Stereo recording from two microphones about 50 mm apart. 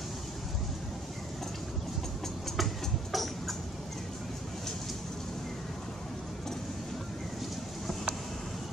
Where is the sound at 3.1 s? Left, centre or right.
Centre.